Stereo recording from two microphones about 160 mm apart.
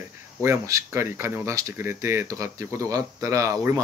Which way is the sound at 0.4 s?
20° right (ahead or behind).